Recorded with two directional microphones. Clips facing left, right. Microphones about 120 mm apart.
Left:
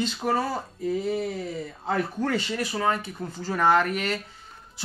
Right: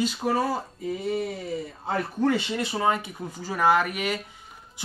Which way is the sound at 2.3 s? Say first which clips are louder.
Even; 20° right (ahead or behind).